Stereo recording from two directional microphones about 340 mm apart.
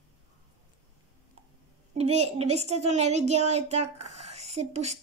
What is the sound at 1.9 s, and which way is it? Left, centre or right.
A woman's voice, centre.